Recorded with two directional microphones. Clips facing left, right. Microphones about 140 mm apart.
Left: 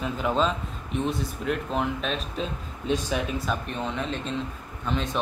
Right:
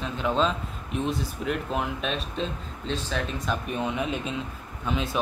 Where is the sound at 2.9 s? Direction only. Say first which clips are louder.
Left 4 dB; 15° left (ahead or behind).